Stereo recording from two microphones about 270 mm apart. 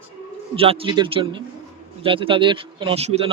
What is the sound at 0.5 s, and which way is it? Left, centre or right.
A man's voice, right.